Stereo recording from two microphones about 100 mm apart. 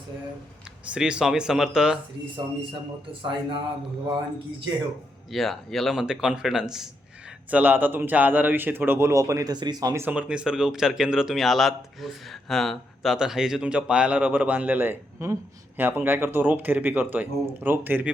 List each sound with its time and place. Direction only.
0.9 s speech: 10° right (ahead or behind)
3.1 s speech: 55° right (ahead or behind)
5.3 s speech: centre (ahead or behind)
7.5 s a man's voice: 20° right (ahead or behind); by 9.9 s 45° right (ahead or behind)
10.1 s speech: 10° right (ahead or behind)
15.2 s speech: 30° right (ahead or behind)
15.8 s a man's voice: 20° right (ahead or behind)